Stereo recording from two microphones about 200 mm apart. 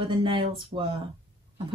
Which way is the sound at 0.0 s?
25° right (ahead or behind).